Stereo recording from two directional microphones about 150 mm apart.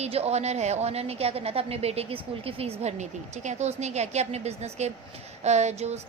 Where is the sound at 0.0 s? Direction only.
45° right (ahead or behind).